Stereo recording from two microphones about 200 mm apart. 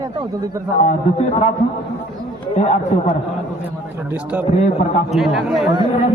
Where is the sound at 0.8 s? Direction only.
35° left (ahead or behind).